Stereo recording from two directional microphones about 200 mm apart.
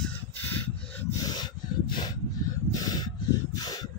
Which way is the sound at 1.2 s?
20° left (ahead or behind).